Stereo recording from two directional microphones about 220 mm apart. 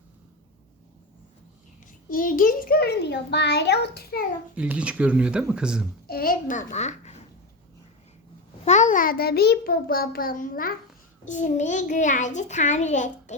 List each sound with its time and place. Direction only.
2.0 s a child's voice: 40° left (ahead or behind)
4.5 s speech: 5° right (ahead or behind)
6.1 s a child's voice: 40° left (ahead or behind)
8.6 s a child's voice: 35° left (ahead or behind)